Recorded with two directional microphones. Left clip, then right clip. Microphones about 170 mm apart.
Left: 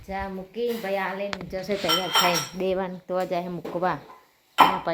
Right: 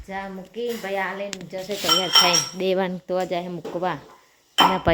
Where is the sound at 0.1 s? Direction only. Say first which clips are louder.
Even; 5° right (ahead or behind).